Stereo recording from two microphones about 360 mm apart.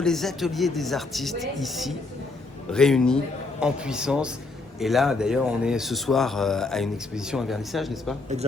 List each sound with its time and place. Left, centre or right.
0.0 s speech: centre